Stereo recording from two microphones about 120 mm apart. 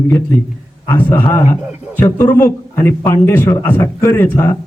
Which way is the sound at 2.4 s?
20° left (ahead or behind).